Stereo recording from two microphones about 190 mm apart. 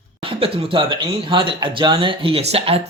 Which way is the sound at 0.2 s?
30° right (ahead or behind).